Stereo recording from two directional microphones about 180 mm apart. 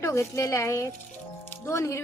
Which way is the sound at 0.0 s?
15° left (ahead or behind).